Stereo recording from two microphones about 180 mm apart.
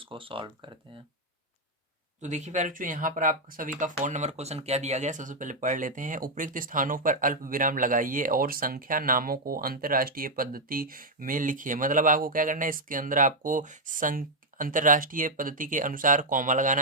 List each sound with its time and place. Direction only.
0.0 s speech: 30° right (ahead or behind)
2.2 s speech: 40° right (ahead or behind)